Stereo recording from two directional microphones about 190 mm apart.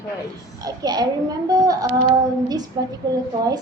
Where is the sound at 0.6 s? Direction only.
20° right (ahead or behind).